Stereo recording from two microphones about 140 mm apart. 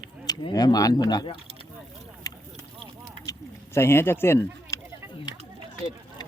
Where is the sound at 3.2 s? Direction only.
20° left (ahead or behind).